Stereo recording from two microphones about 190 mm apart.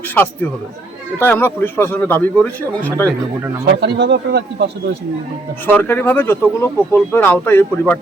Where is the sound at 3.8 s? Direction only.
60° right (ahead or behind).